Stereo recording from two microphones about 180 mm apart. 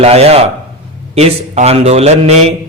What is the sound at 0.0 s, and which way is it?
Speech, 35° right (ahead or behind).